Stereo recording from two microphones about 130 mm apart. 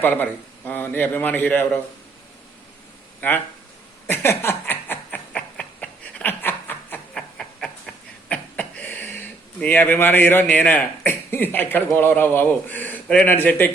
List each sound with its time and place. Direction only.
0.0 s speech: 15° left (ahead or behind)
3.2 s speech: 15° left (ahead or behind)
4.0 s chuckle: 15° left (ahead or behind)
5.3 s a sound: 10° left (ahead or behind)
9.6 s speech: 15° left (ahead or behind)